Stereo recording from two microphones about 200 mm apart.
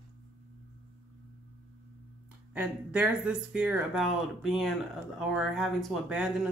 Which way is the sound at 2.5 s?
5° right (ahead or behind).